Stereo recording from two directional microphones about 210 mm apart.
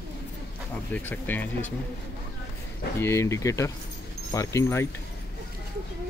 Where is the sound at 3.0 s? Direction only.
15° left (ahead or behind).